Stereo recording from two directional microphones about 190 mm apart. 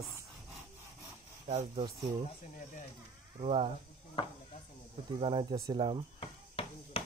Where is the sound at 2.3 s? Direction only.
40° left (ahead or behind).